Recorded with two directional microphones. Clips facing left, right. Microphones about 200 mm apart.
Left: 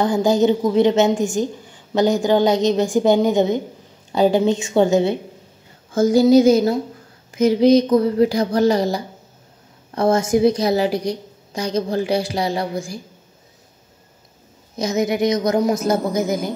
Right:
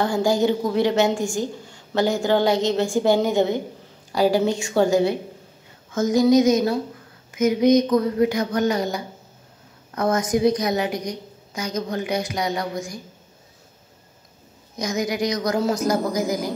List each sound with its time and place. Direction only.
0.0 s a woman's voice: 20° left (ahead or behind)
14.8 s a woman's voice: 25° left (ahead or behind)